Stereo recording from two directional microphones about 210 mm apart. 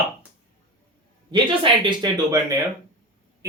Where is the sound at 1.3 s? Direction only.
20° right (ahead or behind).